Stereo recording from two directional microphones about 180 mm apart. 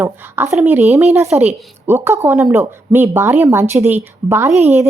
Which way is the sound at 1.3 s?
35° right (ahead or behind).